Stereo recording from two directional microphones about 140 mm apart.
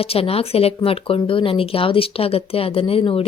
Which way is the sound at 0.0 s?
45° left (ahead or behind).